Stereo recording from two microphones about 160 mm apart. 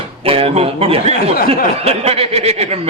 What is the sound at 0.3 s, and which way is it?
Speech, 35° right (ahead or behind).